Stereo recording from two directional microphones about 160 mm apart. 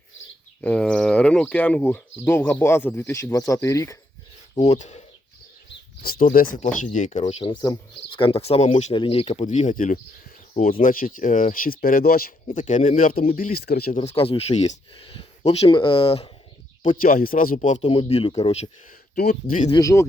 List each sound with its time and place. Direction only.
0.6 s speech: 5° left (ahead or behind)
4.6 s speech: 45° left (ahead or behind)
5.6 s bird: 70° left (ahead or behind)
6.6 s speech: 50° left (ahead or behind)
7.5 s speech: 25° left (ahead or behind); by 8.9 s 45° left (ahead or behind)
8.9 s speech: 35° left (ahead or behind); by 12.3 s 65° left (ahead or behind)
12.5 s speech: 50° left (ahead or behind)
13.1 s speech: 65° left (ahead or behind)
13.5 s speech: 75° left (ahead or behind)
13.9 s speech: 40° left (ahead or behind)
17.0 s speech: 60° left (ahead or behind)
17.8 s speech: 35° left (ahead or behind)
19.7 s speech: 20° left (ahead or behind)